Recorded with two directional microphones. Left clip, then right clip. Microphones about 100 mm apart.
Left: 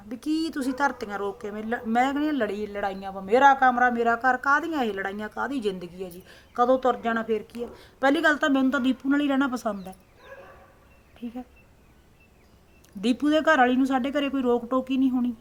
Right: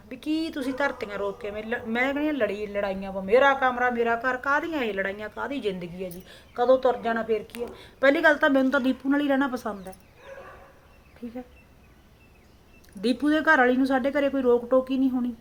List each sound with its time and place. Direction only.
0.1 s speech: 20° left (ahead or behind)
1.9 s a man's voice: 20° left (ahead or behind)
13.0 s speech: 20° left (ahead or behind)